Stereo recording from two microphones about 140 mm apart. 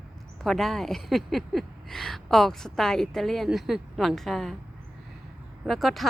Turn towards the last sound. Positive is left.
turn(degrees=0)  # may be behind; listen again after turning